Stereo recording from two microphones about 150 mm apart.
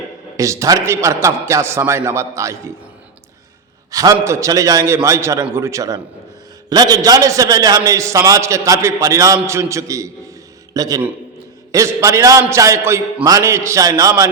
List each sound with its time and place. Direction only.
0.3 s a man's voice: 20° right (ahead or behind)
3.9 s a man's voice: 20° right (ahead or behind)